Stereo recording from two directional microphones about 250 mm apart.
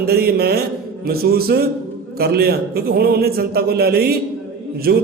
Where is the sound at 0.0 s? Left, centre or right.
Right.